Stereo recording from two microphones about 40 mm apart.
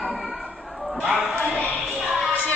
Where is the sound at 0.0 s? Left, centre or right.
Centre.